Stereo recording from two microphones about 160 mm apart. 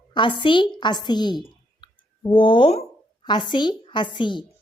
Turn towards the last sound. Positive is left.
turn(degrees=30)  # may be behind; listen again after turning